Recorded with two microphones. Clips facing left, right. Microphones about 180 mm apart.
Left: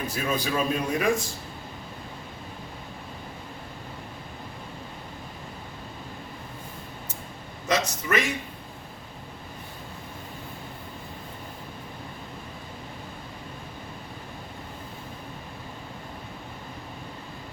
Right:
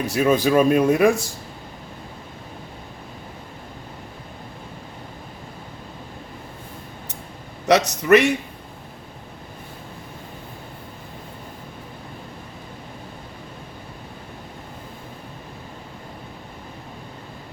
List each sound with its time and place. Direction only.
0.0 s speech: 75° right (ahead or behind)
7.7 s a man's voice: 70° right (ahead or behind)